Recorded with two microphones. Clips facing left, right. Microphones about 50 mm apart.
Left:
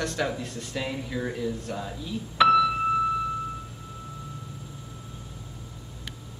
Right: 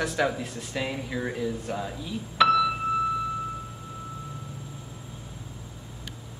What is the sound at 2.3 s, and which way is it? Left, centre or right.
Music, centre.